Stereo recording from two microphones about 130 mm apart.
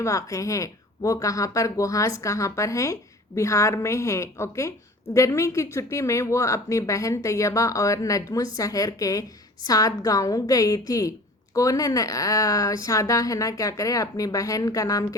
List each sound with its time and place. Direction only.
0.0 s speech: 25° left (ahead or behind)